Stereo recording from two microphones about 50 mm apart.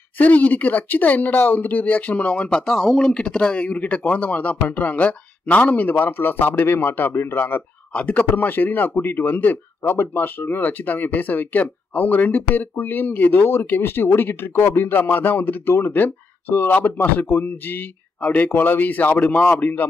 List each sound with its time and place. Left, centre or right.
0.2 s speech: left
2.6 s speech: centre
3.0 s speech: centre
3.6 s speech: left
7.9 s speech: left